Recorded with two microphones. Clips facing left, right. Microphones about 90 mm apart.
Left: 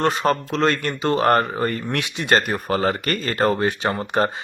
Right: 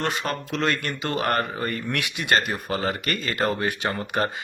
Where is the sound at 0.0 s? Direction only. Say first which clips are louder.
Left 7 dB; 35° left (ahead or behind).